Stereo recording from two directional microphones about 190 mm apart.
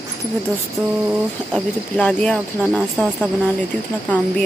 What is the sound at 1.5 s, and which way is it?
Speech, 5° left (ahead or behind).